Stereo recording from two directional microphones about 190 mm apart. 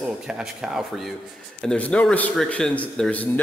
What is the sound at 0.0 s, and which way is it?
A man's voice, 5° right (ahead or behind).